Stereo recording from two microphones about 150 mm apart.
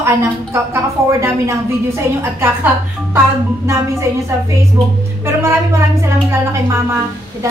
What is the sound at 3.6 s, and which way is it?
Speech, 20° right (ahead or behind).